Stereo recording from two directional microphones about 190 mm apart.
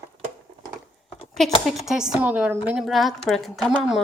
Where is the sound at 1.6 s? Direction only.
Centre (ahead or behind).